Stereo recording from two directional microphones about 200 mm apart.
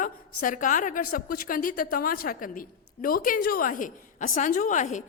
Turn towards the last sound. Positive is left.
turn(degrees=40)  # may be behind; listen again after turning